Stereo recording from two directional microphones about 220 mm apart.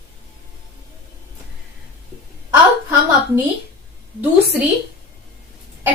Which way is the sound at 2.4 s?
15° right (ahead or behind).